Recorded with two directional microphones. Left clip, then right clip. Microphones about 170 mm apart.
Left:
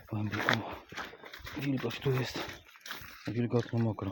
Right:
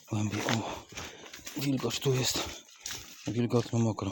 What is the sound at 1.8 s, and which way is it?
Speech, 25° right (ahead or behind).